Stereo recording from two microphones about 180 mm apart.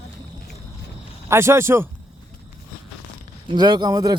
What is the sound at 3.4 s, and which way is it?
Speech, 25° right (ahead or behind).